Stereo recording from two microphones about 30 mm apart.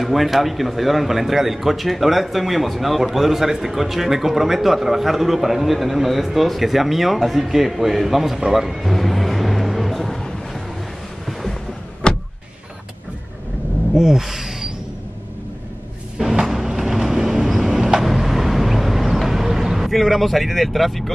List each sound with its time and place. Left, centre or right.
0.0 s speech: centre
8.9 s vehicle: centre
12.0 s power windows: left
13.9 s speech: centre
16.2 s vehicle: centre
19.9 s speech: centre